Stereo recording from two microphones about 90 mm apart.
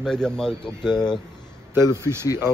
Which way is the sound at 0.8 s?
55° left (ahead or behind).